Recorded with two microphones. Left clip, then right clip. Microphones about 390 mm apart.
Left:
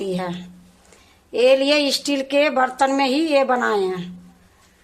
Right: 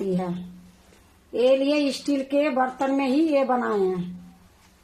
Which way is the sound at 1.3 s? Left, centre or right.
Left.